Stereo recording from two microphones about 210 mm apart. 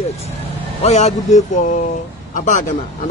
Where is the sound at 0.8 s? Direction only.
30° left (ahead or behind).